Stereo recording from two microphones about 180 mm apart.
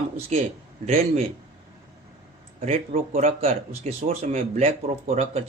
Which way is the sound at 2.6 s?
35° right (ahead or behind).